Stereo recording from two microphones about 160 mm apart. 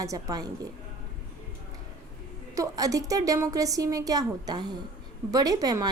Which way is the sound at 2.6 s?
20° right (ahead or behind).